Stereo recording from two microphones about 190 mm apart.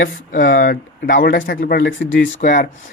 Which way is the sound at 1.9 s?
75° left (ahead or behind).